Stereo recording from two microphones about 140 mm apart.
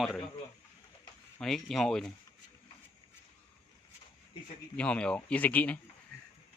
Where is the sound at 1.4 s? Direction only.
5° left (ahead or behind).